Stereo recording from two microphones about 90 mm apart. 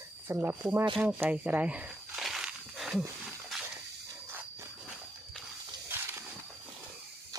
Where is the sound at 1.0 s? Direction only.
15° right (ahead or behind).